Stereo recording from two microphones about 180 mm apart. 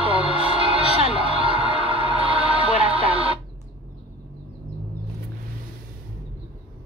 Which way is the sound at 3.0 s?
30° right (ahead or behind).